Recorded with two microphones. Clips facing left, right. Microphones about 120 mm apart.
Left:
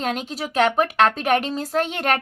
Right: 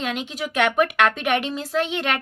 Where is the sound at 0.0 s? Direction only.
40° left (ahead or behind).